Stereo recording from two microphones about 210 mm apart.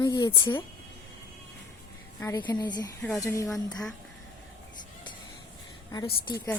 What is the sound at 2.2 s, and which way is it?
A woman's voice, 10° left (ahead or behind).